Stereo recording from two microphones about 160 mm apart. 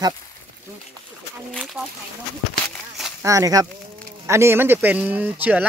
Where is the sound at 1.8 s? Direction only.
5° right (ahead or behind).